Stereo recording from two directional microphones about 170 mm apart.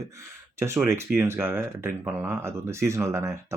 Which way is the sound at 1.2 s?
15° right (ahead or behind).